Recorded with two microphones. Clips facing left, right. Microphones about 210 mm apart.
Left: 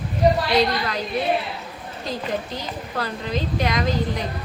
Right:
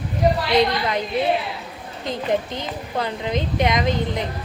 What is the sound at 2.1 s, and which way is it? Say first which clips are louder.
A woman's voice: right 4 dB; 20° right (ahead or behind).